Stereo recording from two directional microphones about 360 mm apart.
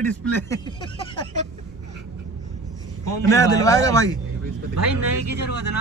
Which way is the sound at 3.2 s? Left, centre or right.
Centre.